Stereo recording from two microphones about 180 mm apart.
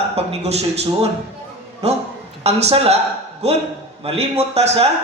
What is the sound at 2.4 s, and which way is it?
Speech, 35° right (ahead or behind).